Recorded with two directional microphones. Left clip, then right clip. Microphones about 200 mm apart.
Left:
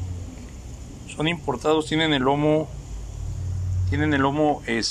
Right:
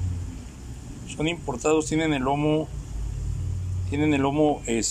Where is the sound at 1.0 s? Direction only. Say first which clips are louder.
Left 3 dB; 10° right (ahead or behind).